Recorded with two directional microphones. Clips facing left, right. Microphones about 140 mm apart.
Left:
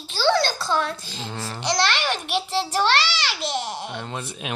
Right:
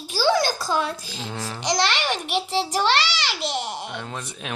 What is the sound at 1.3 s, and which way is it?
Speech, 10° left (ahead or behind).